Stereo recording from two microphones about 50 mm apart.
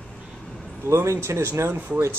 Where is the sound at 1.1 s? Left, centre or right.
Right.